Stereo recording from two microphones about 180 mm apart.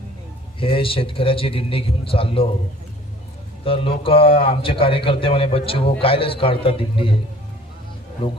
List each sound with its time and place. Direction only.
0.6 s a man's voice: 30° left (ahead or behind)
3.6 s a man's voice: 30° left (ahead or behind)